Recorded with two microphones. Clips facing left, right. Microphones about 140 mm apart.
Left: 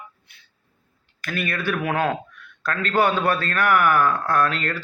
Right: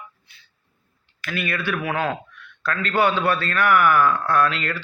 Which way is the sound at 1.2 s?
45° left (ahead or behind).